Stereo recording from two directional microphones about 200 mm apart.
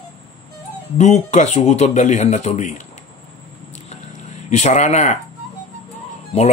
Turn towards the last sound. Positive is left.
turn(degrees=30)  # may be behind; listen again after turning